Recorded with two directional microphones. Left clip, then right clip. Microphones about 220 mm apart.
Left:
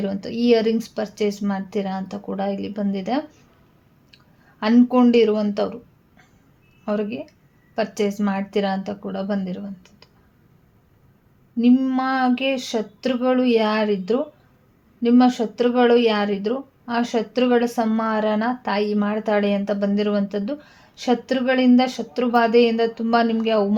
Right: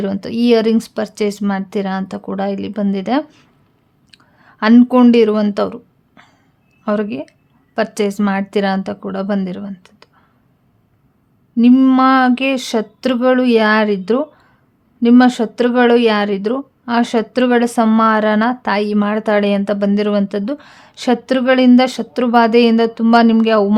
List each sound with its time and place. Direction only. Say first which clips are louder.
0.0 s speech: right 5 dB; 30° right (ahead or behind)
4.6 s speech: right 6 dB; 35° right (ahead or behind)
11.5 s speech: right 8 dB; 35° right (ahead or behind)